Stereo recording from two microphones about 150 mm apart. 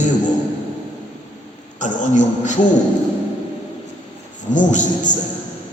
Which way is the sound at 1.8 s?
55° left (ahead or behind).